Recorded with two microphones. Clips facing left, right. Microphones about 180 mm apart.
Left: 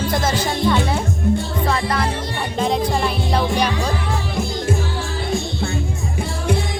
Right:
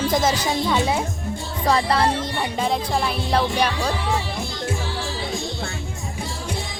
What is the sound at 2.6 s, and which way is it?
Speech, 5° right (ahead or behind).